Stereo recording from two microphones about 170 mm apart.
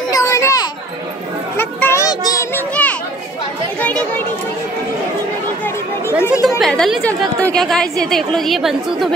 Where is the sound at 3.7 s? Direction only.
10° left (ahead or behind).